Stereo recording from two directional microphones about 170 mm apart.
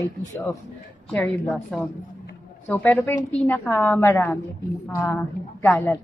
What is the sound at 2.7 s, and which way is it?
A woman's voice, 15° left (ahead or behind).